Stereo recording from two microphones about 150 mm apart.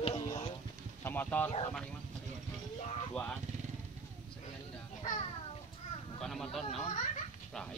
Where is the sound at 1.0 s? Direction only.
15° left (ahead or behind).